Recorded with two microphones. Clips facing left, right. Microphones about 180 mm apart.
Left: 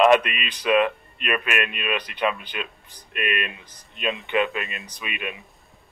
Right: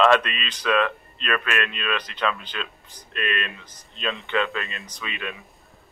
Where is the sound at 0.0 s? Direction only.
15° left (ahead or behind).